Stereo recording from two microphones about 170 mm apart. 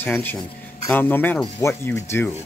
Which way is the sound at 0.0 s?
10° left (ahead or behind).